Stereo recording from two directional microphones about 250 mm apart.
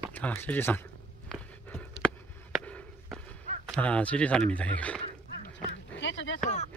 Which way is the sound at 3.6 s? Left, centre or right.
Centre.